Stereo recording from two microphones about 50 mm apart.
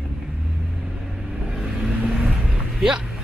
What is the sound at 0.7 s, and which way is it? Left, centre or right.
Vehicle, centre.